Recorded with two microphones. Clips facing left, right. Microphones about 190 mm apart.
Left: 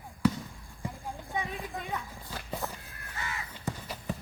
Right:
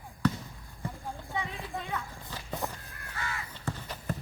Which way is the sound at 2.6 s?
15° right (ahead or behind).